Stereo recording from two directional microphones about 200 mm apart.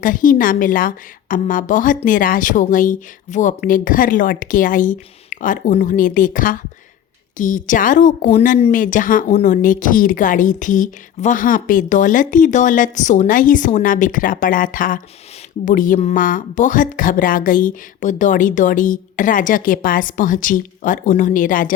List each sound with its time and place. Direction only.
0.0 s speech: 40° left (ahead or behind)